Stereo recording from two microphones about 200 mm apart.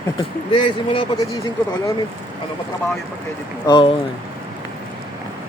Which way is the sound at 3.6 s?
25° left (ahead or behind).